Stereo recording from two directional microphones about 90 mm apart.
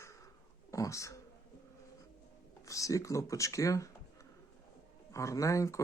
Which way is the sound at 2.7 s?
35° left (ahead or behind).